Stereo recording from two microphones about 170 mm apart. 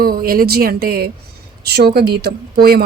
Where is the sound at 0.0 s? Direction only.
60° right (ahead or behind).